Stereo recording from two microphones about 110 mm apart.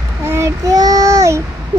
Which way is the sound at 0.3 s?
30° right (ahead or behind).